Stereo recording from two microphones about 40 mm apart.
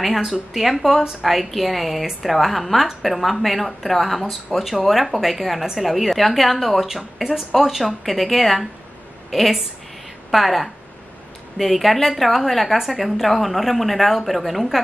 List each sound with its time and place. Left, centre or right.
0.0 s a woman's voice: centre